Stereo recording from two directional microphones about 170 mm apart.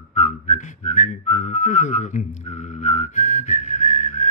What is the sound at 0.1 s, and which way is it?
Whistling, 45° left (ahead or behind).